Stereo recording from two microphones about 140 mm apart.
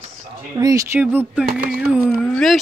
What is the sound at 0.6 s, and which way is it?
Speech, 25° right (ahead or behind).